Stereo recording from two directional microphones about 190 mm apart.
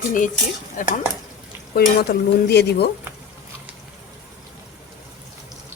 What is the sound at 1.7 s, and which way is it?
Stir, 55° left (ahead or behind).